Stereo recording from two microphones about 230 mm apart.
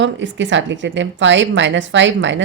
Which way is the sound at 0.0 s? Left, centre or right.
Right.